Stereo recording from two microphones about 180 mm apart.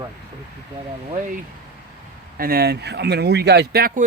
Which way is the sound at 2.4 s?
55° right (ahead or behind).